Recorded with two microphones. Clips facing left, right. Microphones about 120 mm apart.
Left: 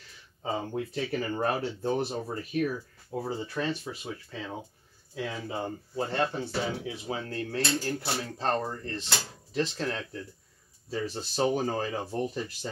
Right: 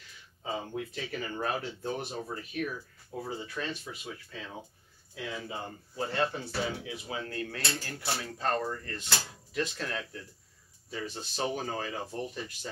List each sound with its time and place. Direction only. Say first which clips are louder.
0.4 s speech: left 4 dB; 35° left (ahead or behind)